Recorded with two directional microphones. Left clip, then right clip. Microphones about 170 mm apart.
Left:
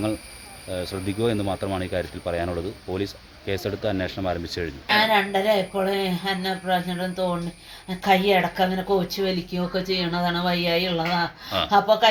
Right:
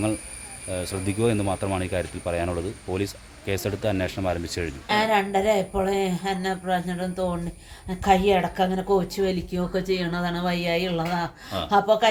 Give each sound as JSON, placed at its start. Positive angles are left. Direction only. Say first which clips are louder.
{"t": 0.7, "sound": "speech", "louder": "even", "side_deg": -15}
{"t": 4.9, "sound": "speech", "louder": "left 2 dB", "side_deg": -5}